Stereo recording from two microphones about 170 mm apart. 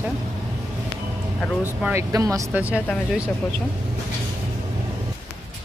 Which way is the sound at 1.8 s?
15° right (ahead or behind).